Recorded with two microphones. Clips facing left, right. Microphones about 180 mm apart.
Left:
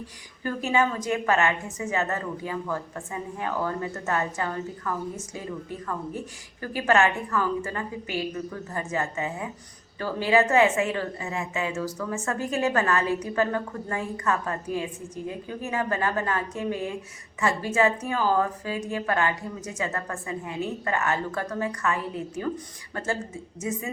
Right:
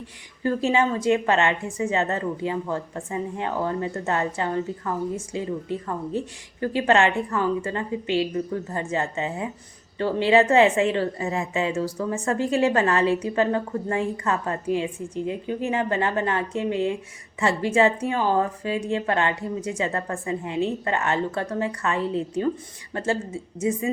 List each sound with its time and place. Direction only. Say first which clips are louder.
0.4 s a woman's voice: right 3 dB; 30° right (ahead or behind)
6.6 s a woman's voice: right 3 dB; 25° right (ahead or behind)
23.6 s a woman's voice: right 7 dB; 30° right (ahead or behind)